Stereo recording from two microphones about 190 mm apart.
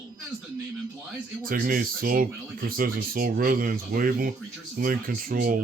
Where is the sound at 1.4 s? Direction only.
45° right (ahead or behind).